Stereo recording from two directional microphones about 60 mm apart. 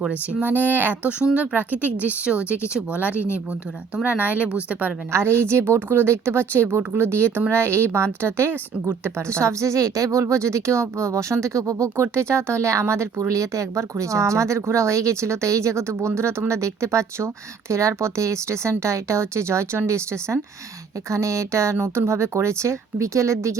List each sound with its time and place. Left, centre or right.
0.4 s speech: right
1.2 s speech: centre
3.1 s speech: left
4.0 s speech: right
5.1 s a woman's voice: right
11.9 s a woman's voice: right